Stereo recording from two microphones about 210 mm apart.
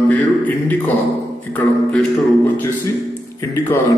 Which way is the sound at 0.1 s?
10° left (ahead or behind).